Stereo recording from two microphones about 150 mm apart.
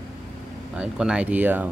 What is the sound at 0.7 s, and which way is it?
Speech, 5° right (ahead or behind).